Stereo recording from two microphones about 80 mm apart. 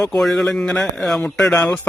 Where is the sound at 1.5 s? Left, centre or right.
Left.